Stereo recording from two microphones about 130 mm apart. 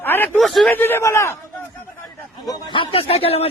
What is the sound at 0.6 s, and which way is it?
Speech, 15° left (ahead or behind).